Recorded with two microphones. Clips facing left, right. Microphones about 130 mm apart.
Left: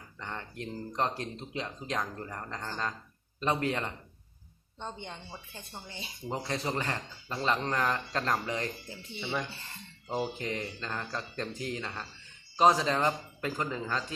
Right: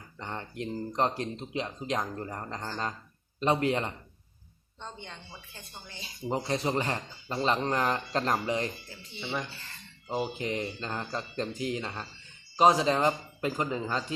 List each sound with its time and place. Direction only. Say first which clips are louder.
0.2 s speech: right 3 dB; 20° right (ahead or behind)
4.8 s speech: left 3 dB; 20° left (ahead or behind)
6.2 s speech: right 4 dB; 20° right (ahead or behind)
9.5 s speech: left 1 dB; 20° left (ahead or behind)
10.3 s speech: right 3 dB; 20° right (ahead or behind)